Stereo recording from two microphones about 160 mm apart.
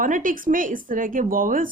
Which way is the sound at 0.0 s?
55° right (ahead or behind).